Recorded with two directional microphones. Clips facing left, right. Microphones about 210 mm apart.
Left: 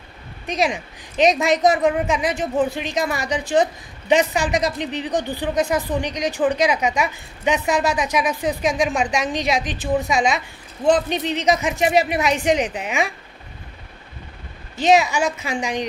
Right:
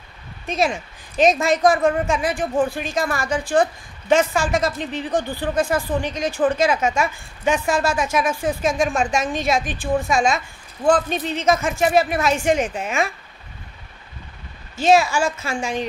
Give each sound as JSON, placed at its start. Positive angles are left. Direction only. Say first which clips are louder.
{"t": 0.5, "sound": "speech", "louder": "even", "side_deg": 15}
{"t": 14.8, "sound": "speech", "louder": "even", "side_deg": 20}